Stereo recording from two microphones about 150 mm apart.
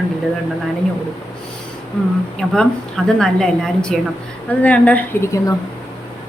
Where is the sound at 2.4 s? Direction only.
5° left (ahead or behind); by 5.5 s 20° left (ahead or behind).